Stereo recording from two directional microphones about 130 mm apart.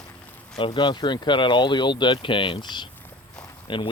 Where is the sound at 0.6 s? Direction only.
35° left (ahead or behind).